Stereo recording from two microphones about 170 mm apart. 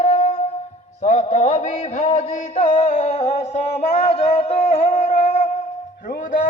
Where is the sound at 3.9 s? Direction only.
40° left (ahead or behind).